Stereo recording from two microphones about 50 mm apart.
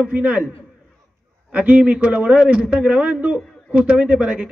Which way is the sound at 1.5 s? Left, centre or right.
Right.